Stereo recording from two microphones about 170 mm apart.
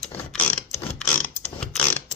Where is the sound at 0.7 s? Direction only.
40° left (ahead or behind).